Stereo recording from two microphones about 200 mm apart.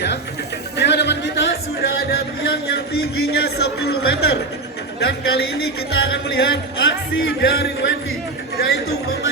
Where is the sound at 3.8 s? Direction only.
55° left (ahead or behind).